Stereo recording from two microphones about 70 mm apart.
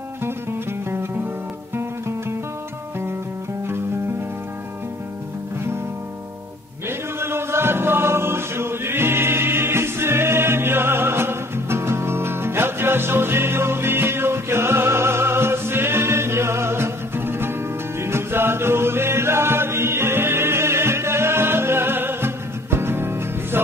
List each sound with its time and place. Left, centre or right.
0.2 s music: right
6.9 s chant: right